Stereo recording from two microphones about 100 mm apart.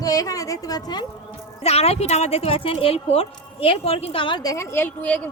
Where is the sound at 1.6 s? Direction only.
90° left; by 4.4 s 60° left (ahead or behind).